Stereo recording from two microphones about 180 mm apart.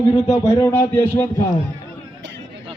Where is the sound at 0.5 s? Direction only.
15° left (ahead or behind).